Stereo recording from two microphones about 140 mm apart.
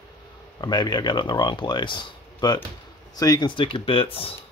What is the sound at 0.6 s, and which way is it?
Speech, 30° left (ahead or behind).